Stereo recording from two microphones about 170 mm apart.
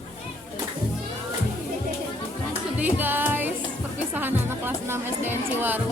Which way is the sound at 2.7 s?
10° right (ahead or behind).